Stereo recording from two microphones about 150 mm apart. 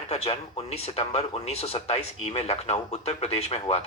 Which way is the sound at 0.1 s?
45° left (ahead or behind).